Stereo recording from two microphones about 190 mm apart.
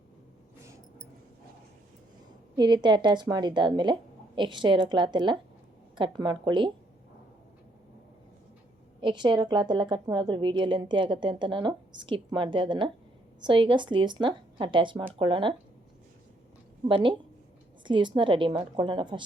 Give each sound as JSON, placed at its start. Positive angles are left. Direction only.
{"t": 2.6, "sound": "a woman's voice", "side_deg": -25}
{"t": 9.0, "sound": "a woman's voice", "side_deg": -25}
{"t": 16.9, "sound": "a woman's voice", "side_deg": -25}